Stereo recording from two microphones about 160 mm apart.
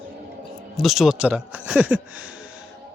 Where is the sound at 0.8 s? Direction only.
Centre (ahead or behind).